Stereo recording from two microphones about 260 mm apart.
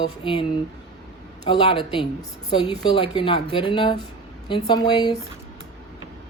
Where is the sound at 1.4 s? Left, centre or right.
Centre.